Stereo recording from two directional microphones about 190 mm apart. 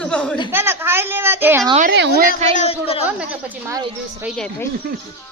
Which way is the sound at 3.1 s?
10° right (ahead or behind).